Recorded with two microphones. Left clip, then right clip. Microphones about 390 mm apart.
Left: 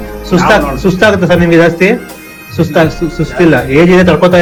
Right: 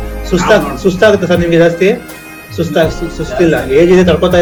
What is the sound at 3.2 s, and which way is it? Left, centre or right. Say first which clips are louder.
Speech: left 3 dB; centre.